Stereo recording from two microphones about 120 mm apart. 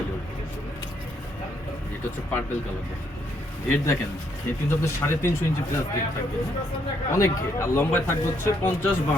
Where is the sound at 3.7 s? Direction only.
25° left (ahead or behind).